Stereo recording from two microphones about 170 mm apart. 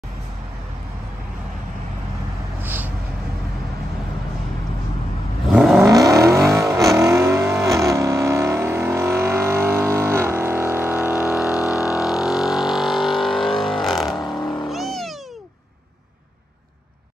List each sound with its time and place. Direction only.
2.6 s a sound: 10° right (ahead or behind)
5.5 s vehicle: 5° right (ahead or behind)
5.8 s vehicle: 20° right (ahead or behind)
11.7 s vehicle: 20° left (ahead or behind)
12.0 s vehicle: centre (ahead or behind)